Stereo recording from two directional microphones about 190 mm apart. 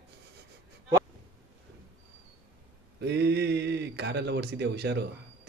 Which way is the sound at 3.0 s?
60° right (ahead or behind).